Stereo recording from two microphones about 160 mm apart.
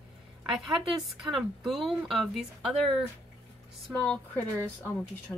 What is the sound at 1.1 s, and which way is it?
Speech, centre (ahead or behind).